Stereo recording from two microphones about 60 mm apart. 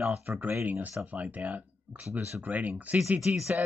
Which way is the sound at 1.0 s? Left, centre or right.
Right.